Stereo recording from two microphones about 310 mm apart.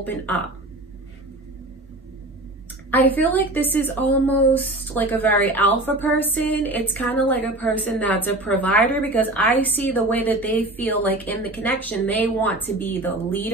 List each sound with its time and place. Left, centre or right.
0.0 s a woman's voice: centre
2.9 s a woman's voice: centre